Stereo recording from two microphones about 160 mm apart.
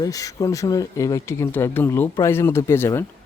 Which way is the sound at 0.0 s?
20° left (ahead or behind).